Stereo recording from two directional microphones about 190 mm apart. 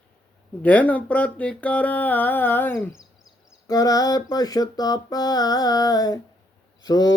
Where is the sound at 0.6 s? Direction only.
10° left (ahead or behind).